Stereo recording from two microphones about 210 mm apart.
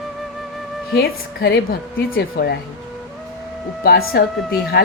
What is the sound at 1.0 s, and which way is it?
A woman's voice, 50° left (ahead or behind).